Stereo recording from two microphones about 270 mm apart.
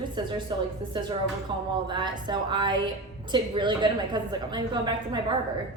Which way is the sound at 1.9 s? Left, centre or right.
Centre.